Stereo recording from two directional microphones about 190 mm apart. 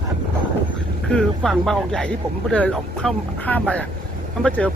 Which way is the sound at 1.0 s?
5° left (ahead or behind).